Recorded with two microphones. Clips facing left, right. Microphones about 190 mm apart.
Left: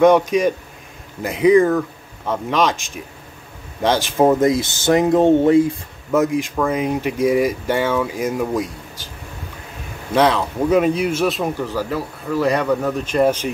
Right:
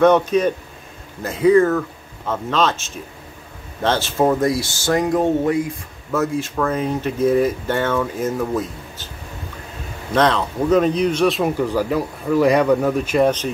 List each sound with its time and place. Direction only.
0.0 s speech: 10° left (ahead or behind); by 5.8 s 30° left (ahead or behind)
6.1 s speech: 15° left (ahead or behind)
10.1 s speech: 10° left (ahead or behind)
11.5 s speech: 15° right (ahead or behind)
13.2 s speech: 10° left (ahead or behind)